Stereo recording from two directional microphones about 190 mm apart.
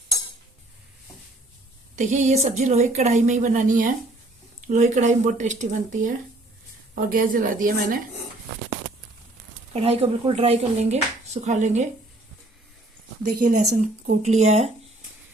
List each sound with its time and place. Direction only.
2.0 s a woman's voice: 40° right (ahead or behind)
9.7 s speech: 35° right (ahead or behind)
13.2 s a woman's voice: 50° right (ahead or behind)